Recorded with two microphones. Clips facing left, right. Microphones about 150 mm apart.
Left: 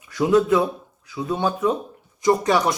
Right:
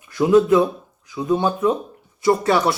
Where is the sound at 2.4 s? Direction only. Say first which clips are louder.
Right 2 dB; 15° left (ahead or behind).